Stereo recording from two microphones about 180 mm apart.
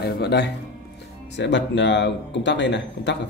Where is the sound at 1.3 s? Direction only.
80° left.